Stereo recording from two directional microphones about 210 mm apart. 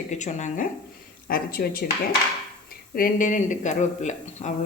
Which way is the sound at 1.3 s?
45° left (ahead or behind).